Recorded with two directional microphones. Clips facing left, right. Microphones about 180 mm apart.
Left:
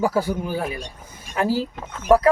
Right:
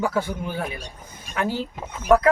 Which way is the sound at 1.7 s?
10° right (ahead or behind).